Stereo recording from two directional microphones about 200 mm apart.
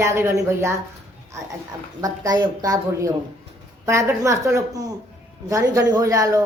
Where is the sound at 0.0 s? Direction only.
15° right (ahead or behind).